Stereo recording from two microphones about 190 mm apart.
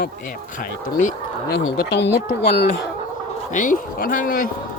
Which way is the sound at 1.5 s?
65° left (ahead or behind).